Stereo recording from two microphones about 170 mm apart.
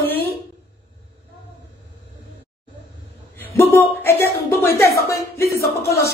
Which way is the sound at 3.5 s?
15° left (ahead or behind).